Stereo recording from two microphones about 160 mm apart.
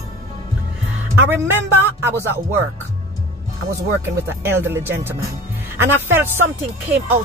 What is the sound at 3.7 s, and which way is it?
Speech, 15° right (ahead or behind).